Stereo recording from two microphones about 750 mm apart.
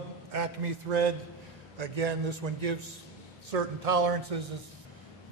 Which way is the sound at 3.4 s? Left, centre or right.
Right.